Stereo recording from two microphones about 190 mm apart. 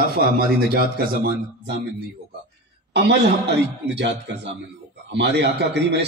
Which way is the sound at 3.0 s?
60° right (ahead or behind).